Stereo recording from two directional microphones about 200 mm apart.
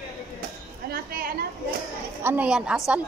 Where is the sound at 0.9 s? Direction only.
45° right (ahead or behind).